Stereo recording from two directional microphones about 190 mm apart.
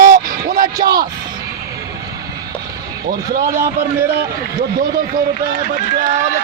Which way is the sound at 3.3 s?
50° right (ahead or behind).